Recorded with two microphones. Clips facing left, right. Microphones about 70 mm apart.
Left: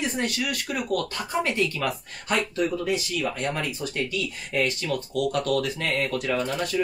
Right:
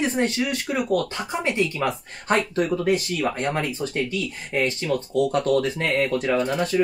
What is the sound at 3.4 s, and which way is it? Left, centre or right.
Speech, right.